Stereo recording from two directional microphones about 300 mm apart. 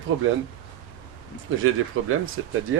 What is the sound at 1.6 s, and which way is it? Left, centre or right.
Speech, right.